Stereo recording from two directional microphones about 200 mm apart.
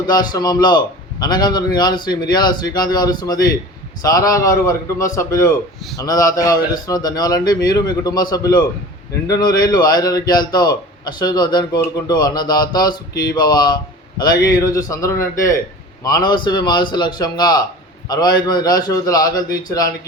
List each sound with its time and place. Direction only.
0.1 s a man's voice: 20° left (ahead or behind)